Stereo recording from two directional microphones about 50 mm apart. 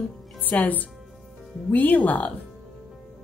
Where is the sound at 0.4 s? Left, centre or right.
Left.